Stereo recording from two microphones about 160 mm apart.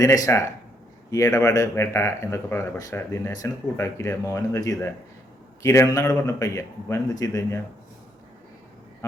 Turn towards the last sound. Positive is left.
turn(degrees=20)  # may be behind; listen again after turning